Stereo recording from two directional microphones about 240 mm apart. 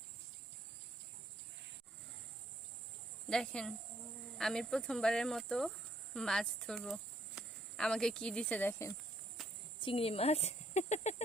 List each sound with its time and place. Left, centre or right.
3.2 s speech: centre
9.4 s a sound: centre
9.8 s speech: left